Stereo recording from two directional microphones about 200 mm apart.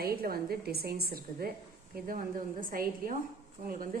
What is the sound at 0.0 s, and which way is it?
A woman's voice, 50° right (ahead or behind).